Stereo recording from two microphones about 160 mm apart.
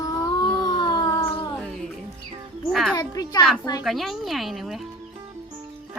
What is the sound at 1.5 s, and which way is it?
Music, 5° left (ahead or behind).